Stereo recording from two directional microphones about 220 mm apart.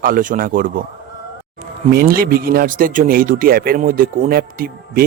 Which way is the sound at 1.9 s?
45° right (ahead or behind).